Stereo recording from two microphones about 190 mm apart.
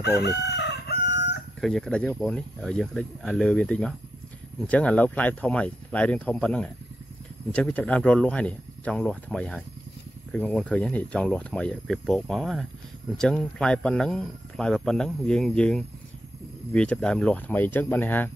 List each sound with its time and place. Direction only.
0.0 s crowing: 60° left (ahead or behind)
1.6 s speech: centre (ahead or behind)